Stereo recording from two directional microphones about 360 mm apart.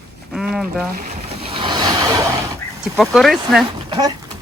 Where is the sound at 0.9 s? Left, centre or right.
Centre.